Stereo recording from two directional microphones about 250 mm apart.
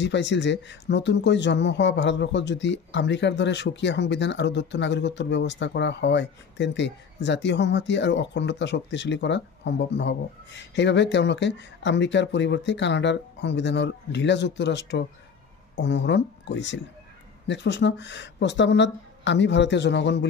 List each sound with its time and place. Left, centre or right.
0.0 s speech: left